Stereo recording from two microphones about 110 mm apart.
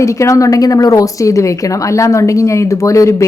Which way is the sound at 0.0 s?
30° left (ahead or behind).